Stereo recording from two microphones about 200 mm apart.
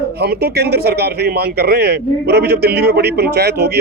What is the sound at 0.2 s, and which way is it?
Speech, 55° right (ahead or behind).